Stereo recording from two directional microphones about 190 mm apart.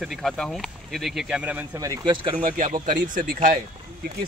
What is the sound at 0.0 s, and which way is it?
Speech, centre (ahead or behind).